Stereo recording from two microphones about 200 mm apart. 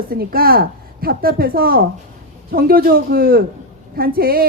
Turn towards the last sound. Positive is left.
turn(degrees=-45)  # may be behind; listen again after turning